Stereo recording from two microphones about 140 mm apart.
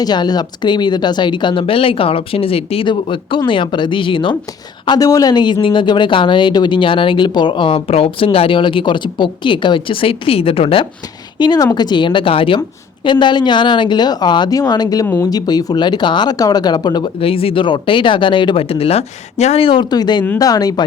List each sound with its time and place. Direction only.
0.0 s speech: 30° left (ahead or behind)
4.9 s speech: 25° left (ahead or behind); by 10.8 s 40° left (ahead or behind)
11.3 s speech: 30° left (ahead or behind)